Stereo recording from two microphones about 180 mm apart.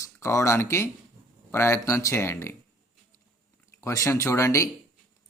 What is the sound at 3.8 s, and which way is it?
Speech, 15° left (ahead or behind).